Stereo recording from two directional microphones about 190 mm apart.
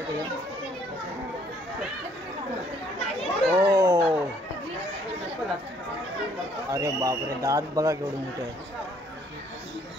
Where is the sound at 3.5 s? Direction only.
15° right (ahead or behind).